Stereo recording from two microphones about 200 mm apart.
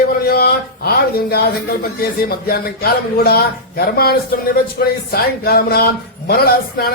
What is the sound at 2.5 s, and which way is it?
Speech, 50° left (ahead or behind).